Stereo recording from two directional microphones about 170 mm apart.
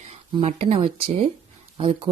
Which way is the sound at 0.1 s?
35° right (ahead or behind).